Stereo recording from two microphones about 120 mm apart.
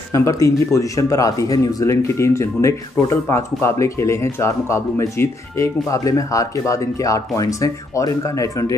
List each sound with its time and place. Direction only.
0.1 s speech: 25° left (ahead or behind)